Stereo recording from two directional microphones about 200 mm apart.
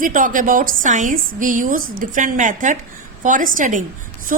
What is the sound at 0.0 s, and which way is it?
A woman's voice, 45° right (ahead or behind).